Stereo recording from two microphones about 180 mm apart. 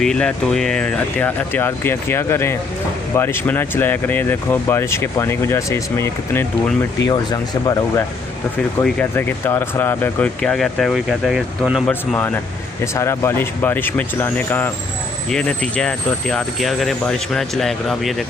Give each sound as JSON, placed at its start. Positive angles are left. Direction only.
{"t": 0.0, "sound": "speech", "side_deg": 5}
{"t": 8.8, "sound": "speech", "side_deg": 10}
{"t": 11.9, "sound": "speech", "side_deg": 10}